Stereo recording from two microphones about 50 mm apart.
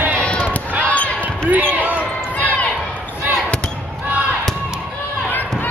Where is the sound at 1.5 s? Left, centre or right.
Right.